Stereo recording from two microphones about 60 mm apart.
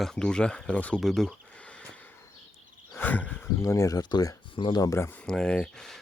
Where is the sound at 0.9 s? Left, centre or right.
Centre.